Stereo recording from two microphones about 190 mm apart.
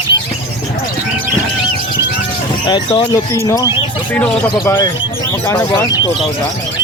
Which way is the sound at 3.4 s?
15° left (ahead or behind).